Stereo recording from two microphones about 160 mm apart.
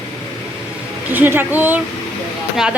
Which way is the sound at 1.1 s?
10° right (ahead or behind).